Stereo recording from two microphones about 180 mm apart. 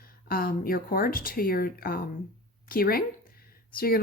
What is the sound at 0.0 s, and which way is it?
A woman's voice, 55° left (ahead or behind).